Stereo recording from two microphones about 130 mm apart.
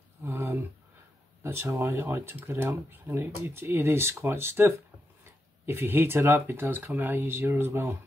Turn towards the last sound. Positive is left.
turn(degrees=-15)  # may be behind; listen again after turning